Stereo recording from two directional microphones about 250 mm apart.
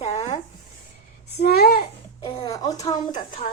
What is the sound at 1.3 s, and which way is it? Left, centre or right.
Speech, left.